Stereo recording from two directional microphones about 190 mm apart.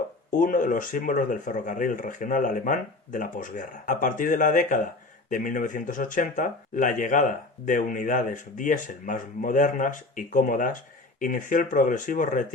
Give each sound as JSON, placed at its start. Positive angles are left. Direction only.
{"t": 0.3, "sound": "speech", "side_deg": 45}